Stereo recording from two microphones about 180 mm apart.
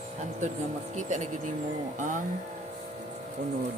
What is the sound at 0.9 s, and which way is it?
Speech, 40° right (ahead or behind).